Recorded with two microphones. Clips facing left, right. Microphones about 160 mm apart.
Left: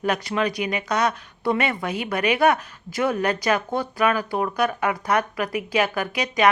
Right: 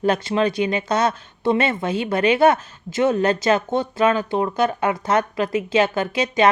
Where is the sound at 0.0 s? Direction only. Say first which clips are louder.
Right 4 dB; 25° right (ahead or behind).